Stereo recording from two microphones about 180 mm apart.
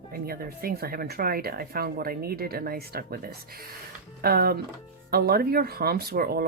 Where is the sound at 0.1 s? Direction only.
55° right (ahead or behind).